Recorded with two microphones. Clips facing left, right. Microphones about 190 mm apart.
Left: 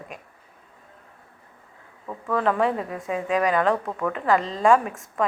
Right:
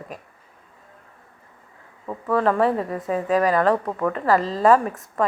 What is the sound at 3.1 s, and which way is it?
Speech, 40° right (ahead or behind).